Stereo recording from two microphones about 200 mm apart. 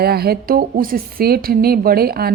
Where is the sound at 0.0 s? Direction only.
50° right (ahead or behind).